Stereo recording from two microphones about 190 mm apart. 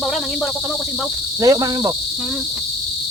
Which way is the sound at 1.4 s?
20° right (ahead or behind).